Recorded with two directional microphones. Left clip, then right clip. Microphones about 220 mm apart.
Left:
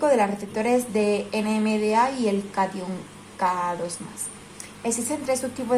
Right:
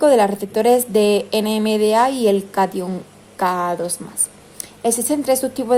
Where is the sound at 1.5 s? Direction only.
65° right (ahead or behind).